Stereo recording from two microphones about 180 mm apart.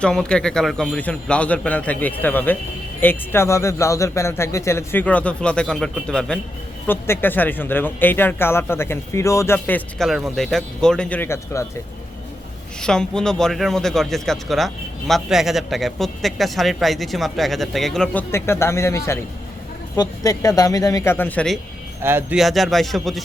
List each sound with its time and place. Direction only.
0.0 s speech: 5° left (ahead or behind)
10.1 s a man's voice: centre (ahead or behind)
12.8 s a man's voice: 5° left (ahead or behind)
22.0 s speech: 10° right (ahead or behind)
22.4 s a man's voice: centre (ahead or behind)